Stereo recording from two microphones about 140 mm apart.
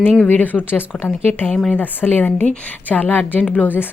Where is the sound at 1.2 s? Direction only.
15° left (ahead or behind).